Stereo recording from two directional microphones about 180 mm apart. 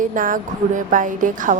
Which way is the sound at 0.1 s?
50° right (ahead or behind).